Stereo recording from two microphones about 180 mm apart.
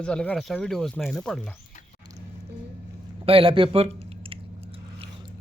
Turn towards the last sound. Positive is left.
turn(degrees=-30)  # may be behind; listen again after turning